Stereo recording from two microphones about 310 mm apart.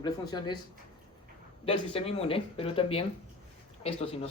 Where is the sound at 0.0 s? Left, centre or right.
Centre.